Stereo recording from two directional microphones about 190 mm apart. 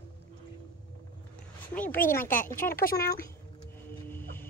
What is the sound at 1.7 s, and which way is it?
Speech, 10° left (ahead or behind).